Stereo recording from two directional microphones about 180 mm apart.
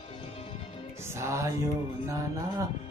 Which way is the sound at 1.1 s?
15° right (ahead or behind).